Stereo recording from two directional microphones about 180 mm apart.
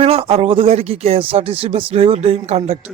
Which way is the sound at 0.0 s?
35° right (ahead or behind).